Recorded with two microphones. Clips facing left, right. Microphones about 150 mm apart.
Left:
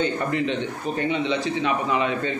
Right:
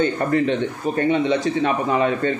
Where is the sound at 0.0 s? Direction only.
50° right (ahead or behind).